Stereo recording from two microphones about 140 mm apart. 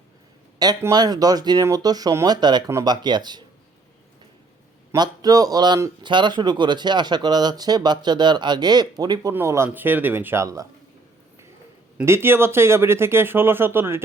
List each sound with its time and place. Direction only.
0.8 s speech: 25° right (ahead or behind)
4.9 s a man's voice: 25° right (ahead or behind)
9.3 s speech: 20° right (ahead or behind)
11.9 s speech: 15° right (ahead or behind)